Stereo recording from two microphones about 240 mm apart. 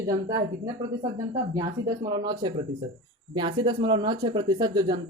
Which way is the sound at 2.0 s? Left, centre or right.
Centre.